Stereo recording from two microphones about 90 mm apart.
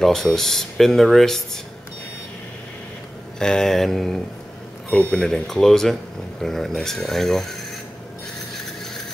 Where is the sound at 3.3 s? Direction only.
5° left (ahead or behind).